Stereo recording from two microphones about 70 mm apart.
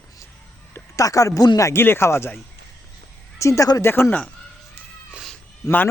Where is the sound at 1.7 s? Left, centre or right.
Left.